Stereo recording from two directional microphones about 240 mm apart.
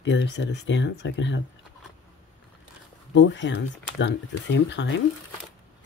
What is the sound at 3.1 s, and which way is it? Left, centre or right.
Speech, left.